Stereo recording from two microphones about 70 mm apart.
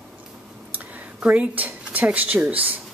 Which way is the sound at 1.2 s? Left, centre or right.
Right.